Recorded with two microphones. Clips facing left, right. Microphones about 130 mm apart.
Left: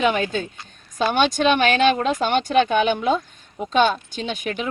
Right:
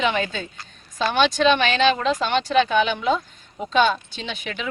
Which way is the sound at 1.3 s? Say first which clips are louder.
Left 1 dB; 45° left (ahead or behind).